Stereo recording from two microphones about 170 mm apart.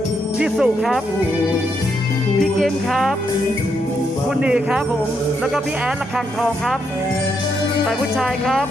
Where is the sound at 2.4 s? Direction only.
Centre (ahead or behind).